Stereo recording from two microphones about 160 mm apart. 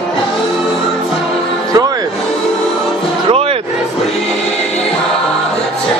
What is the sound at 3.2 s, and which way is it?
Vehicle, 35° right (ahead or behind).